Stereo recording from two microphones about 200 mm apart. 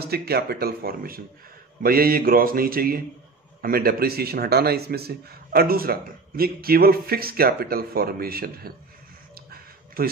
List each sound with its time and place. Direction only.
0.0 s a man's voice: 50° right (ahead or behind)